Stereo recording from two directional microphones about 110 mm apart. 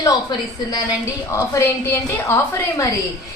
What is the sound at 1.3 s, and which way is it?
A woman's voice, 25° left (ahead or behind).